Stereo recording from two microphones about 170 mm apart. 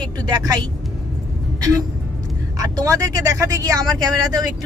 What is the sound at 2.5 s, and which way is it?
Speech, 20° right (ahead or behind).